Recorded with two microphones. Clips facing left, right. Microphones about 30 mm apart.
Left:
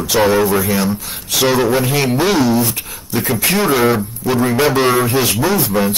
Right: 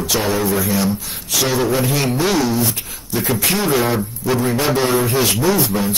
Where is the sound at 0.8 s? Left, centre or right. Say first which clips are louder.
Left 1 dB; left.